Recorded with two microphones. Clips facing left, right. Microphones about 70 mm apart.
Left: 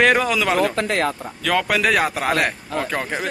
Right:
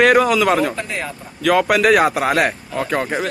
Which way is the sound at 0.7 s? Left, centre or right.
Left.